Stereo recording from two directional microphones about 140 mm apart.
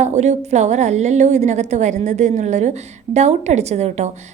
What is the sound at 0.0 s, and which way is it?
A woman's voice, 55° right (ahead or behind).